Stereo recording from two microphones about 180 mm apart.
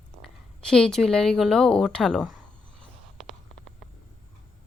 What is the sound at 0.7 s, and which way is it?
Speech, 5° left (ahead or behind).